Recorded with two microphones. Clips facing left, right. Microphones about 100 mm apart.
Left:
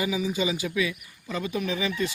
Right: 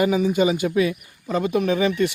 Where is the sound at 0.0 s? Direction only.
50° right (ahead or behind).